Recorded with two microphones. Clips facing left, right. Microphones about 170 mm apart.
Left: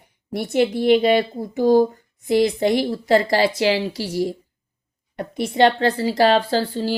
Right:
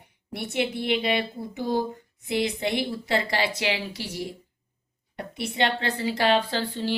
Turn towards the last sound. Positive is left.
turn(degrees=35)  # may be behind; listen again after turning